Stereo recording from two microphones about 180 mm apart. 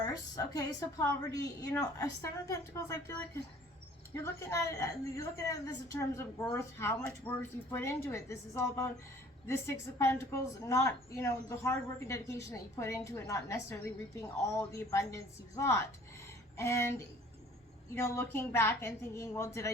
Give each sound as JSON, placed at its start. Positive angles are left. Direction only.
{"t": 0.0, "sound": "a woman's voice", "side_deg": 20}
{"t": 17.9, "sound": "a woman's voice", "side_deg": 15}